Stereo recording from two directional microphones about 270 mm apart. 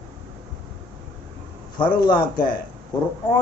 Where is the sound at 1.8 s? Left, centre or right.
Left.